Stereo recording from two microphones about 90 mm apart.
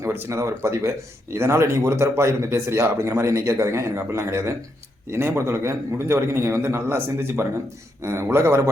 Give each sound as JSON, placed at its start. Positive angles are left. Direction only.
{"t": 0.0, "sound": "a man's voice", "side_deg": -30}